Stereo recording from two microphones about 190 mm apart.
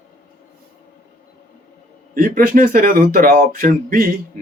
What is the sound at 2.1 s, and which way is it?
Speech, 45° right (ahead or behind).